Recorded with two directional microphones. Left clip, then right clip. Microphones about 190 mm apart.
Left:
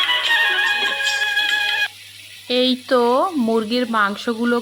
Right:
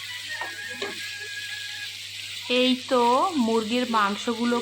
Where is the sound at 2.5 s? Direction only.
15° left (ahead or behind).